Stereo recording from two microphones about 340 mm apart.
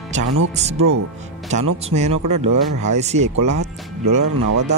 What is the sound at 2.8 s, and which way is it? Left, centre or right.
Speech, centre.